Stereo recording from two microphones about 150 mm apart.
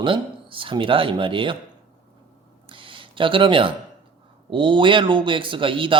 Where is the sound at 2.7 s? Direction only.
35° right (ahead or behind).